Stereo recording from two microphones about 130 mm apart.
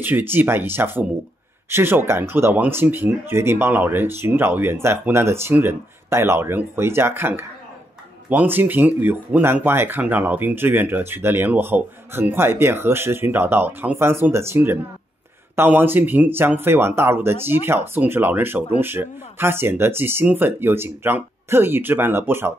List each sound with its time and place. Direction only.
0.0 s speech: 15° right (ahead or behind)